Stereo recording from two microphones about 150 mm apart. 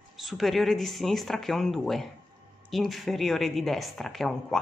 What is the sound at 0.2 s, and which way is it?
A woman's voice, centre (ahead or behind).